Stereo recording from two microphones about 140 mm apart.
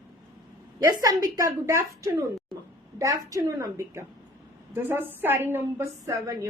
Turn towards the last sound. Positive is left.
turn(degrees=-20)  # may be behind; listen again after turning